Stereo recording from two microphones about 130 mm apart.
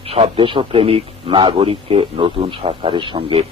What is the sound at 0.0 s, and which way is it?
A man's voice, 50° right (ahead or behind).